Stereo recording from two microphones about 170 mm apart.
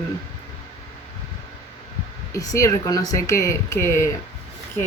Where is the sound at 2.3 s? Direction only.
20° left (ahead or behind).